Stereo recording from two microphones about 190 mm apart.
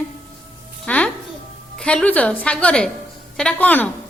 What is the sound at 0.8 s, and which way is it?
Music, 5° left (ahead or behind).